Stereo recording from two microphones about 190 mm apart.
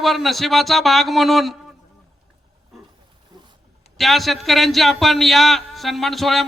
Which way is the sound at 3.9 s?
Centre (ahead or behind).